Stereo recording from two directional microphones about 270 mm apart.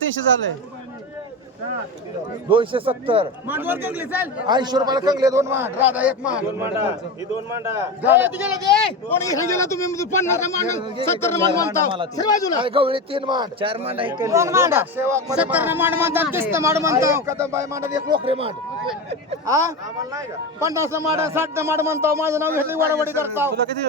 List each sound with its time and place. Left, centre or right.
0.1 s speech: right
2.5 s speech: centre
3.4 s speech: centre
9.0 s speech: centre
12.6 s speech: centre